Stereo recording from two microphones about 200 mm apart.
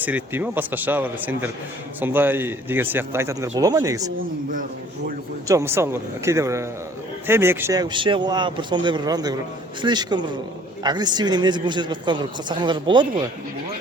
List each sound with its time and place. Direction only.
0.0 s speech: 10° right (ahead or behind)
5.5 s speech: 15° right (ahead or behind)